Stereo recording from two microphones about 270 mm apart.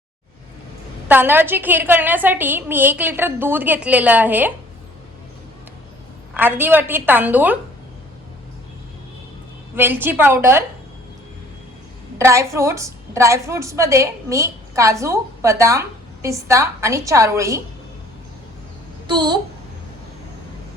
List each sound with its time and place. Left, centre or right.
1.0 s a woman's voice: centre
6.3 s a woman's voice: centre
9.7 s a woman's voice: centre
12.1 s a woman's voice: centre
19.0 s a child's voice: centre